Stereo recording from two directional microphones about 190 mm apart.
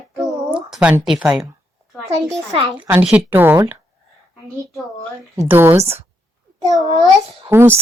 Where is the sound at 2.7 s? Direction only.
10° right (ahead or behind).